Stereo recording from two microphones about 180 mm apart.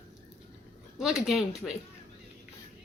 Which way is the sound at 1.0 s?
Centre (ahead or behind).